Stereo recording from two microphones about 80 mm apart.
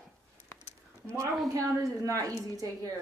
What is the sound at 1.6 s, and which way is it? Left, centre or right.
A woman's voice, right.